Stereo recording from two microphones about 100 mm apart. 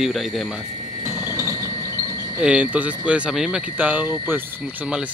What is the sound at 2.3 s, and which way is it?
Speech, 15° right (ahead or behind).